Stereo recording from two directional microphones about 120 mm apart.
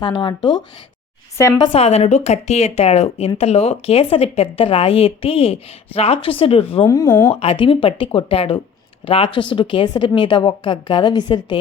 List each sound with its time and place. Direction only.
0.0 s a woman's voice: 40° left (ahead or behind)
1.4 s speech: 25° left (ahead or behind)
1.7 s speech: 60° left (ahead or behind)
6.8 s speech: 25° left (ahead or behind)
7.3 s a woman's voice: 50° left (ahead or behind)